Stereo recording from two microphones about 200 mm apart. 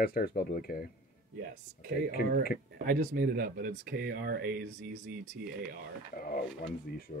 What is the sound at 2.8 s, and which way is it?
Speech, 45° right (ahead or behind).